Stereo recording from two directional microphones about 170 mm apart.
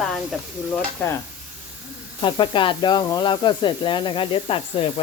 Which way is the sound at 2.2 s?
30° left (ahead or behind).